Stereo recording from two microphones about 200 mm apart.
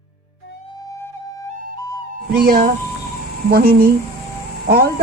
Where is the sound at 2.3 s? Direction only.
45° right (ahead or behind).